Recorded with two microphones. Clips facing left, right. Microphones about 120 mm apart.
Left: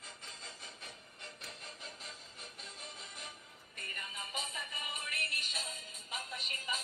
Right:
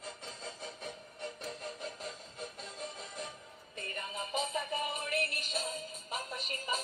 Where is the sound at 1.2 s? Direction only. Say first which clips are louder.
Right 10 dB; 45° right (ahead or behind).